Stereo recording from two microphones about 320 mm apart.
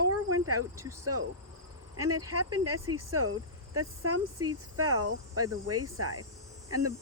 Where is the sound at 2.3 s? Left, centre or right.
Right.